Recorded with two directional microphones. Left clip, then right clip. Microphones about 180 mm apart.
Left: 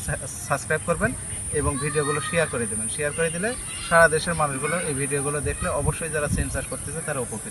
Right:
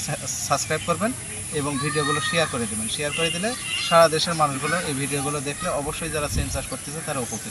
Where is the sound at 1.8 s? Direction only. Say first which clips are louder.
Right 3 dB; 40° left (ahead or behind).